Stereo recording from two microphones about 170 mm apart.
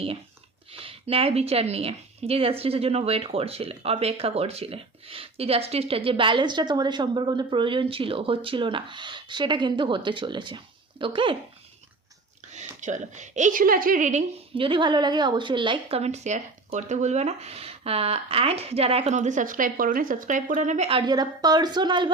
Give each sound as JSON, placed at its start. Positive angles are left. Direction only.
{"t": 0.7, "sound": "a woman's voice", "side_deg": -35}
{"t": 12.5, "sound": "a woman's voice", "side_deg": -45}
{"t": 21.1, "sound": "a woman's voice", "side_deg": -25}